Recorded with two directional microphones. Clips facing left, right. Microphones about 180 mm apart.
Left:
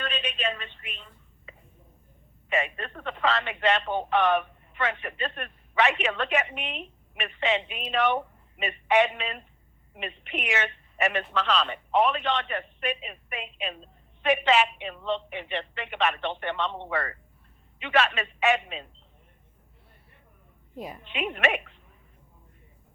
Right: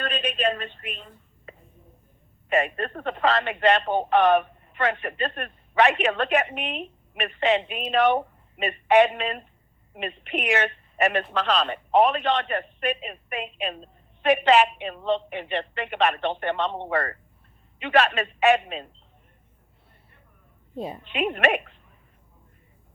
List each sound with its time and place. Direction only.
0.0 s a woman's voice: 40° right (ahead or behind)
20.7 s a woman's voice: 25° right (ahead or behind)
21.1 s speech: 45° right (ahead or behind)